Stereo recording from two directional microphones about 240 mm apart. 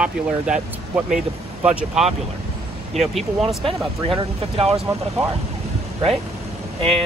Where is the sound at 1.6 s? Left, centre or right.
Centre.